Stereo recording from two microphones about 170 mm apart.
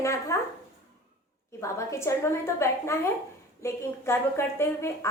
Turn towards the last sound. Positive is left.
turn(degrees=15)  # may be behind; listen again after turning